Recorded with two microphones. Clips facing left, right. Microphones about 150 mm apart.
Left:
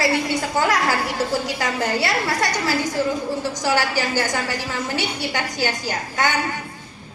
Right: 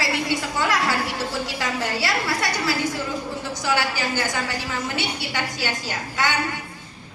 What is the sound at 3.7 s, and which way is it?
A woman's voice, 40° left (ahead or behind).